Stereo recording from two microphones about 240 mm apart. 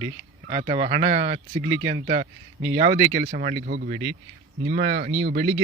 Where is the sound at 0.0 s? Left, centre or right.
Right.